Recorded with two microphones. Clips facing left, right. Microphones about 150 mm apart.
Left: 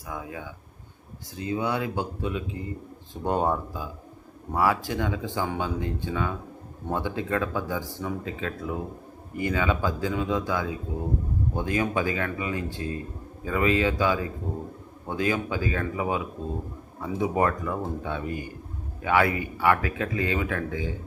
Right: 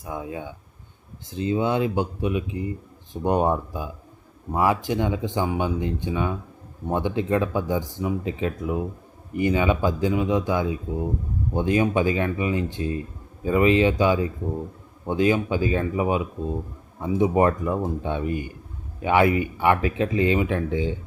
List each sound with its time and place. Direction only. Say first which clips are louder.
0.0 s speech: right 4 dB; 25° right (ahead or behind)